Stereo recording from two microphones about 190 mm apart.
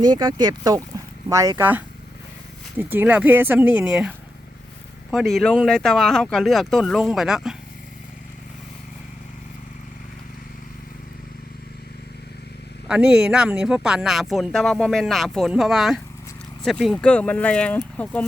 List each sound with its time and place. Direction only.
0.0 s speech: 20° right (ahead or behind)
5.1 s speech: centre (ahead or behind)
12.9 s speech: 5° right (ahead or behind)